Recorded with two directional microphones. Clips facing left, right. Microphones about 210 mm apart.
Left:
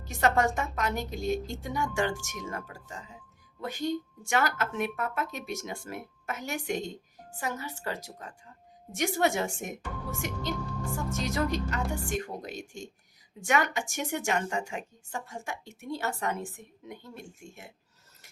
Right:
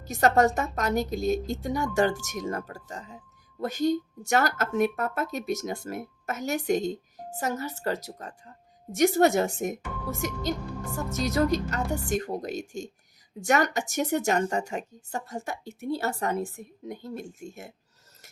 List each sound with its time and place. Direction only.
0.0 s speech: 40° right (ahead or behind)